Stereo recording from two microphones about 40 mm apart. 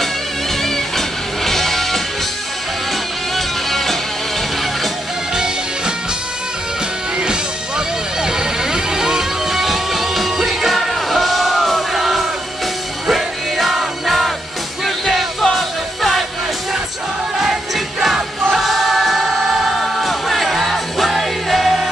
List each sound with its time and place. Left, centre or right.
0.6 s music: centre
3.3 s music: centre
5.3 s music: centre
7.2 s music: centre
17.4 s music: centre
18.5 s choir: centre